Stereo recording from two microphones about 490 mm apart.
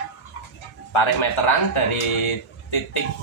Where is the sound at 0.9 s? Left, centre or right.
Left.